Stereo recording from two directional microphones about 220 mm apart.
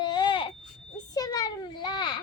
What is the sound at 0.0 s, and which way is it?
Baby cry, 20° left (ahead or behind).